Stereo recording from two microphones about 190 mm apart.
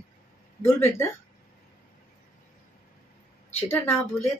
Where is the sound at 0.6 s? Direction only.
10° left (ahead or behind).